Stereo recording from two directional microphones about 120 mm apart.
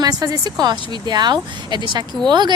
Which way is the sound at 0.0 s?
30° right (ahead or behind).